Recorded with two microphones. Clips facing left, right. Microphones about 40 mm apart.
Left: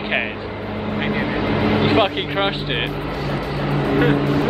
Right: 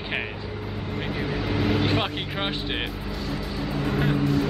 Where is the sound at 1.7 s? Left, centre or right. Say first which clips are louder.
Left 8 dB; left.